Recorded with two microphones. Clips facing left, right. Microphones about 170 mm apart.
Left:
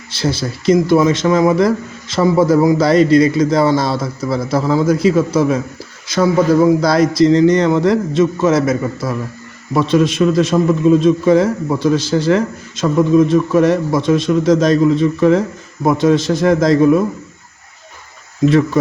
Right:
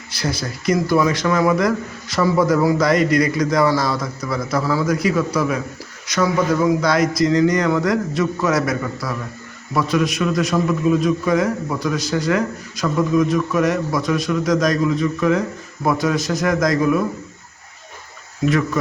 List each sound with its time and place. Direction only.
0.1 s a man's voice: 25° left (ahead or behind)
18.4 s a man's voice: 30° left (ahead or behind)